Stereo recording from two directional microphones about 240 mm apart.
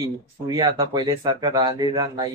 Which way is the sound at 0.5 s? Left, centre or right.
Centre.